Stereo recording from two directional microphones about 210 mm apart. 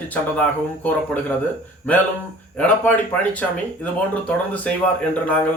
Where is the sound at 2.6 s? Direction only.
5° left (ahead or behind).